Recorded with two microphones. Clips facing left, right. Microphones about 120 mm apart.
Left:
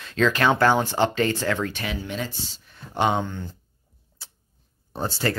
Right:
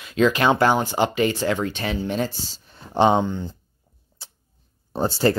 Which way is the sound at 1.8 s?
35° right (ahead or behind).